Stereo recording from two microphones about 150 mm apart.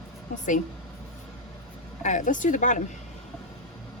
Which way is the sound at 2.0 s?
55° left (ahead or behind).